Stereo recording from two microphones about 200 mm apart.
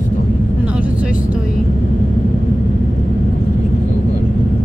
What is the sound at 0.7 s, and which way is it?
Vehicle, 5° right (ahead or behind).